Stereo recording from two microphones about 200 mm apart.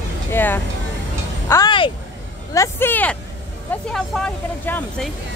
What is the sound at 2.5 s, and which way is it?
Speech, 10° left (ahead or behind).